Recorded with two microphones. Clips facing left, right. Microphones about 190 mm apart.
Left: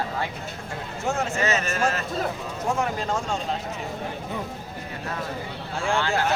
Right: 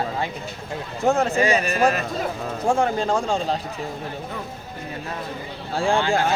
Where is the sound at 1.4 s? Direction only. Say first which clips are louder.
Right 5 dB; 15° right (ahead or behind).